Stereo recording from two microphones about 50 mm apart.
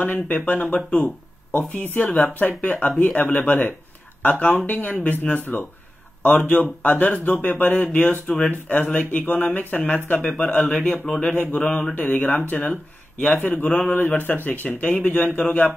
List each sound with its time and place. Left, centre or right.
0.0 s speech: left
3.3 s speech: left
6.6 s speech: left
10.2 s speech: centre; by 12.7 s left
13.2 s speech: centre
13.9 s speech: left
14.8 s speech: left